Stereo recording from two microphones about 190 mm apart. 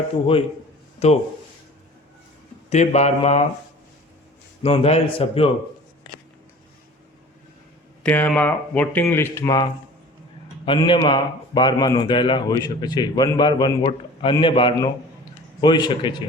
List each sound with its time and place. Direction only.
0.9 s speech: 35° left (ahead or behind)
2.6 s a man's voice: 35° left (ahead or behind)
4.6 s a man's voice: 30° left (ahead or behind)
8.0 s speech: 10° left (ahead or behind)
10.7 s speech: 25° left (ahead or behind)